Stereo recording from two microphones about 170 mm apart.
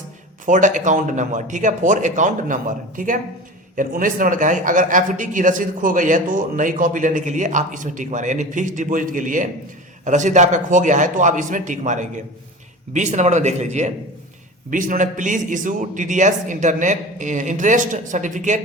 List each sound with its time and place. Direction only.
0.4 s a man's voice: 50° right (ahead or behind)